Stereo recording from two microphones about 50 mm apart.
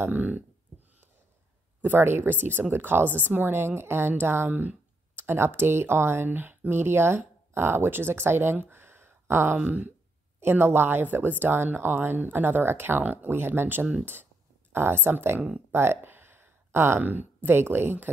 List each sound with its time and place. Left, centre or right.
0.1 s speech: right
1.8 s speech: right
6.2 s speech: right
8.6 s a sound: right
9.7 s speech: right